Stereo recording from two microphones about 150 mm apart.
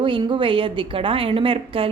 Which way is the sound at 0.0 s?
30° right (ahead or behind).